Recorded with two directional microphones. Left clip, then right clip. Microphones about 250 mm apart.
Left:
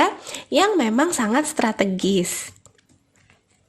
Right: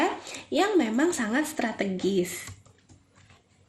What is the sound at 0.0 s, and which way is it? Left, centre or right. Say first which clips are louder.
Speech: left 7 dB; left.